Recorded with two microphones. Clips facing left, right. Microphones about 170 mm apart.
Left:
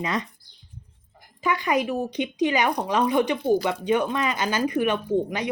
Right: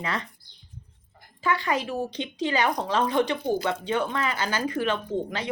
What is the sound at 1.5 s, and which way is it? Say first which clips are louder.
A woman's voice: left 3 dB; 15° left (ahead or behind).